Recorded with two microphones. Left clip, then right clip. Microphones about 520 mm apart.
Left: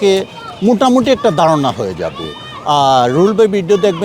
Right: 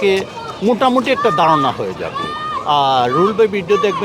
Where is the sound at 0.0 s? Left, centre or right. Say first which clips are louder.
Left 3 dB; left.